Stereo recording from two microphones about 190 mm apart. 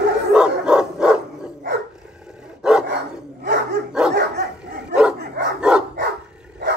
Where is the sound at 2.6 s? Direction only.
5° right (ahead or behind).